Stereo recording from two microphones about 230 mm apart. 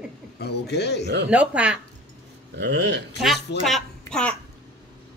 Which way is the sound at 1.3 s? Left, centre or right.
Centre.